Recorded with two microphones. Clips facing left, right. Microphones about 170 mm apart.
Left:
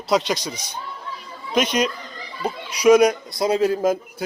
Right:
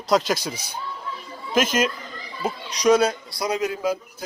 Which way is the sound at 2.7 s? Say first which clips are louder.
Left 4 dB; 10° left (ahead or behind).